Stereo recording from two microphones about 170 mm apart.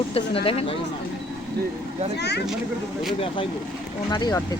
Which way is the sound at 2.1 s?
80° left.